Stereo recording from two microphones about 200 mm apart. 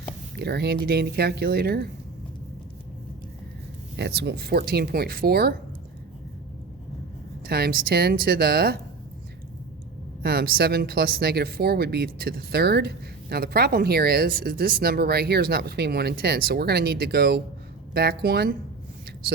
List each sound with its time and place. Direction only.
0.3 s speech: 55° right (ahead or behind)
3.9 s speech: 60° right (ahead or behind)
7.4 s speech: 50° right (ahead or behind)
10.2 s speech: 50° right (ahead or behind)